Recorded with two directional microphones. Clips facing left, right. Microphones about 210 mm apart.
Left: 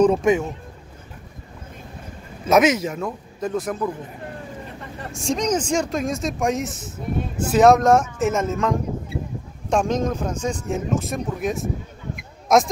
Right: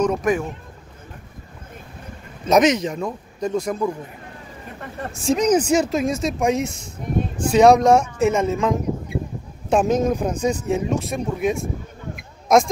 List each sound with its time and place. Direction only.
0.0 s speech: 25° left (ahead or behind)
2.4 s speech: 5° left (ahead or behind)
5.1 s a man's voice: 5° right (ahead or behind)